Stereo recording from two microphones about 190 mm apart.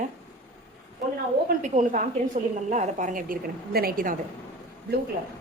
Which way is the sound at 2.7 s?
40° right (ahead or behind).